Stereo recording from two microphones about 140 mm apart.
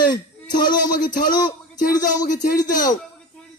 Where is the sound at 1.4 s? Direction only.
30° left (ahead or behind).